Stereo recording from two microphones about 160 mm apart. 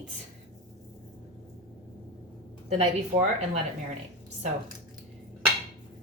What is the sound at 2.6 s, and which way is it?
Speech, 45° right (ahead or behind).